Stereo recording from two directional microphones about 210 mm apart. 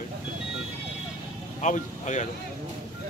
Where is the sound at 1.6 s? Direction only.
35° left (ahead or behind).